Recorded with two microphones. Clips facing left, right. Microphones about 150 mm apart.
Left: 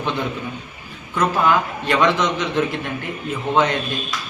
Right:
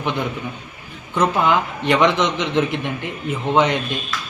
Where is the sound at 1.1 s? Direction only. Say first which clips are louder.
Right 1 dB; 20° right (ahead or behind).